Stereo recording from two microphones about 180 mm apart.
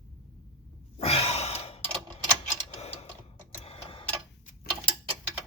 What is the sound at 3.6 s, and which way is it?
Clock, 30° left (ahead or behind).